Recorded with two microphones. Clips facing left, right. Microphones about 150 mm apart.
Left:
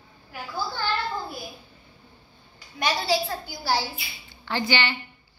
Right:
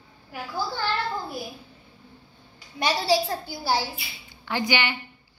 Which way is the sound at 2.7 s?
35° right (ahead or behind).